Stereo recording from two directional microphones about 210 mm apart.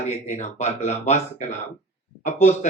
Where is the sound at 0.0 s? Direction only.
35° left (ahead or behind).